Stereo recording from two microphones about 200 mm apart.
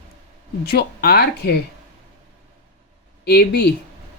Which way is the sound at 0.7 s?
50° left (ahead or behind).